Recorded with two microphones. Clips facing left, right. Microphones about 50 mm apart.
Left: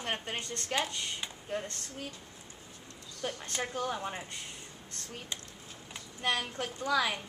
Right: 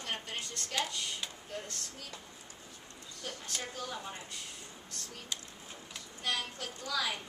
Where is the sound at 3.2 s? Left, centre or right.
Left.